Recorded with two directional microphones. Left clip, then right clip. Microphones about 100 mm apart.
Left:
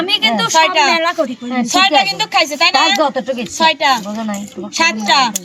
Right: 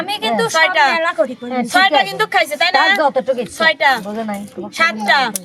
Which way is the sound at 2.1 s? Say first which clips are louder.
Left 1 dB; 45° right (ahead or behind).